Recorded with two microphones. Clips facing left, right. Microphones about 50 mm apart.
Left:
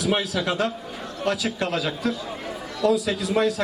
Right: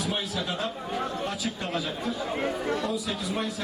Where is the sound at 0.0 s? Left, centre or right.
Left.